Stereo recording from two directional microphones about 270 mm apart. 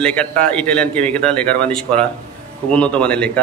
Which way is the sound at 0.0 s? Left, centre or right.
Centre.